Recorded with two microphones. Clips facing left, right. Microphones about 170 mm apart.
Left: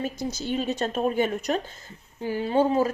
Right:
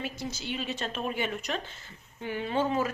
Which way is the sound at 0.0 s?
45° left (ahead or behind).